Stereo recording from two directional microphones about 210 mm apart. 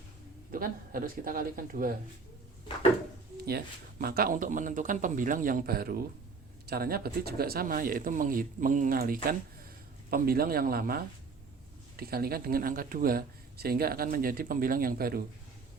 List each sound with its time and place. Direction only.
0.5 s speech: 45° right (ahead or behind)
3.4 s speech: 45° right (ahead or behind)